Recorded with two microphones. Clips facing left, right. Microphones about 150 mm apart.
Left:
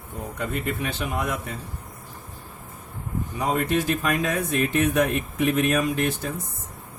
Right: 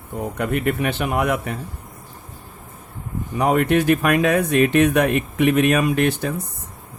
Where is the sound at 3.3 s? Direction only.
65° right (ahead or behind).